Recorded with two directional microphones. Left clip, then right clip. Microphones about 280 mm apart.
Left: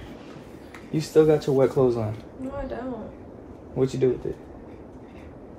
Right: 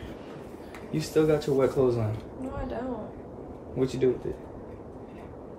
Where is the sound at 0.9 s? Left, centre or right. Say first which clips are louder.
Left 5 dB; centre.